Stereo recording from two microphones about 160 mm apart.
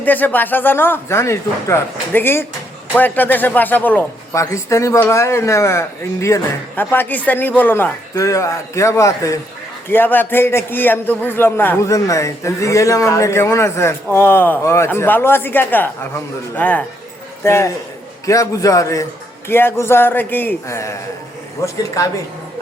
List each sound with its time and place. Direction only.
0.0 s a man's voice: 10° left (ahead or behind)